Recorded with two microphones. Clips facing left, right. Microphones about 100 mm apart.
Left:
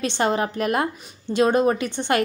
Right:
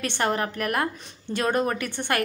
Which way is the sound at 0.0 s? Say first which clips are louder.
Left 4 dB; 20° left (ahead or behind).